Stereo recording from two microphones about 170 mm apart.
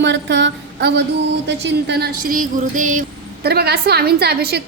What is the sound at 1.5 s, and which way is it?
A woman's voice, 80° right.